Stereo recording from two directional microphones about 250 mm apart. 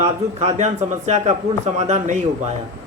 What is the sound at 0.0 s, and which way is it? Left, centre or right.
A man's voice, right.